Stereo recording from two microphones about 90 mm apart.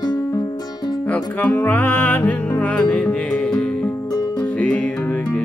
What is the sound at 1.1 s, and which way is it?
Music, 20° left (ahead or behind).